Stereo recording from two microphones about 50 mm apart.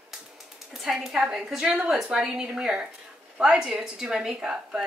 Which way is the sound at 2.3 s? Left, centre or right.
Centre.